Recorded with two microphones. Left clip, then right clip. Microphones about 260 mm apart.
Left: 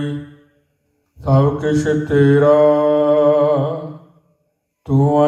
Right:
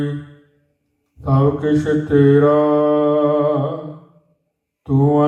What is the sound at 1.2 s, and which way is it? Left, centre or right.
Mantra, left.